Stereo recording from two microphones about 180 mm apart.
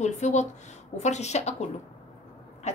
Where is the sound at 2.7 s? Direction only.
40° left (ahead or behind).